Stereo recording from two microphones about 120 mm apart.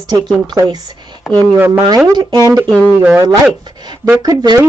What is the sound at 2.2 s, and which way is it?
Speech, 35° right (ahead or behind).